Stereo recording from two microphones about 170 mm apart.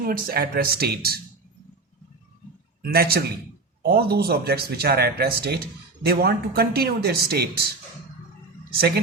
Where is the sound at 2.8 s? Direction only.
65° right (ahead or behind).